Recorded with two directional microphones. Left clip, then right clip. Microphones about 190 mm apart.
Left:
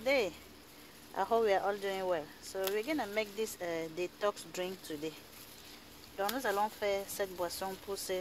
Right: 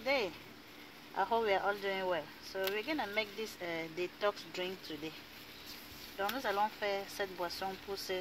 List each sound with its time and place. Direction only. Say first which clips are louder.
0.0 s a sound: left 3 dB; 55° left (ahead or behind)
1.1 s speech: left 2 dB; 50° left (ahead or behind)
6.1 s speech: left 1 dB; 60° left (ahead or behind)